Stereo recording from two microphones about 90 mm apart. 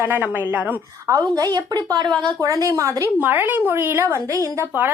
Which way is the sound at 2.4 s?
40° right (ahead or behind).